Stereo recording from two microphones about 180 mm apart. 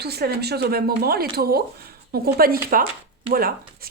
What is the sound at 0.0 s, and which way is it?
Speech, 65° right (ahead or behind).